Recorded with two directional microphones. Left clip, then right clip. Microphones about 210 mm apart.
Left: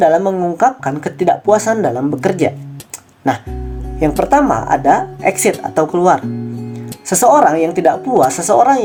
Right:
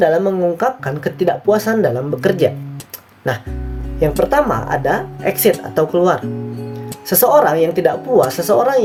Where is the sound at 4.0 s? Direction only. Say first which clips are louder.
Left 2 dB; 30° left (ahead or behind).